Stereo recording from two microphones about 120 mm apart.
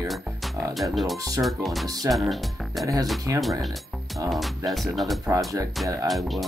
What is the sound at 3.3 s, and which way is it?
Speech, 20° right (ahead or behind).